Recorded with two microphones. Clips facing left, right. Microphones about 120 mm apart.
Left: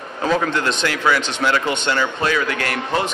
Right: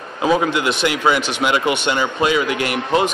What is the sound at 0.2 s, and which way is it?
Speech, 10° right (ahead or behind).